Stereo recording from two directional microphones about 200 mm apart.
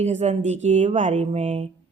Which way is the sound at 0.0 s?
35° right (ahead or behind).